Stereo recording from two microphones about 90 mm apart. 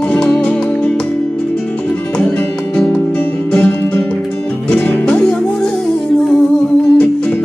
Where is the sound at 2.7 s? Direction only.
15° left (ahead or behind).